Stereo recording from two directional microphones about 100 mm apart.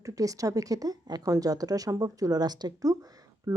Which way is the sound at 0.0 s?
35° right (ahead or behind).